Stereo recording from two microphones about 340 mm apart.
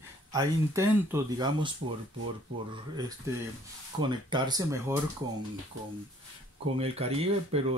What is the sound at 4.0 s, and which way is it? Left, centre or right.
Speech, centre.